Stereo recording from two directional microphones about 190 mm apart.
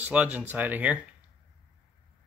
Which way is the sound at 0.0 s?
5° right (ahead or behind).